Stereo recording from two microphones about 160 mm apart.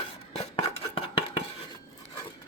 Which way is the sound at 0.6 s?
35° left (ahead or behind).